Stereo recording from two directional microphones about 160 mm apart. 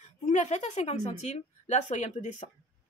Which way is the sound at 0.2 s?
50° left (ahead or behind).